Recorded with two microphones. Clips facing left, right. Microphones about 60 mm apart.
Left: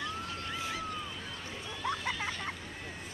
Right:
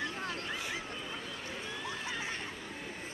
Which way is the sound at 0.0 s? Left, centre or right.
Right.